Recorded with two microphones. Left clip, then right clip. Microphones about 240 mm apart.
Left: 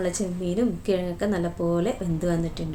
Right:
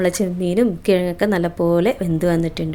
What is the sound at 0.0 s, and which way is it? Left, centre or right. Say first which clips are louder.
A woman's voice: right 8 dB; right.